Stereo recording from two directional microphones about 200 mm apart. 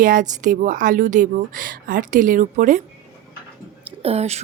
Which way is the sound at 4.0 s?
30° right (ahead or behind).